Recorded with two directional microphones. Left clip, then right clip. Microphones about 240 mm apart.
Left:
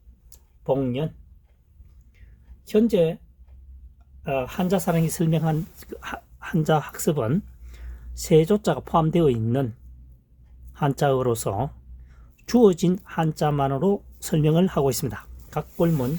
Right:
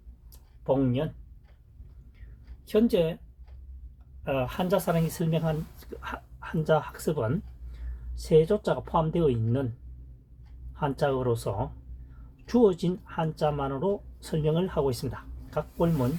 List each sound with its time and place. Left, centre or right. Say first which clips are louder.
0.3 s a sound: left 3 dB; left
2.6 s speech: left 4 dB; left
4.2 s speech: left 3 dB; left
10.7 s speech: left 5 dB; left